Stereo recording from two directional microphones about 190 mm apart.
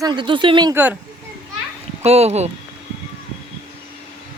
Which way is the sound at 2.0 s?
35° right (ahead or behind).